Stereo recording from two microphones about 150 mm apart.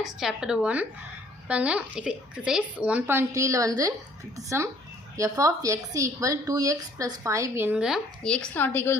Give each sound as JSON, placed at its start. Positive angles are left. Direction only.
{"t": 0.0, "sound": "a woman's voice", "side_deg": -5}